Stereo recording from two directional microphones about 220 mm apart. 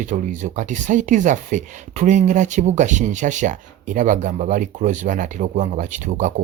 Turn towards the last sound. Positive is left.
turn(degrees=-35)  # may be behind; listen again after turning